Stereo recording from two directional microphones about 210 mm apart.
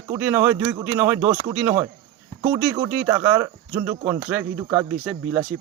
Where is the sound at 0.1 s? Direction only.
10° right (ahead or behind).